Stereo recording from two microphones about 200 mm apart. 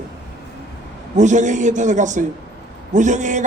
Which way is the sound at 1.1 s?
35° right (ahead or behind).